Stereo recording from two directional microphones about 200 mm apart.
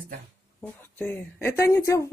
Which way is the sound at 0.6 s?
10° left (ahead or behind).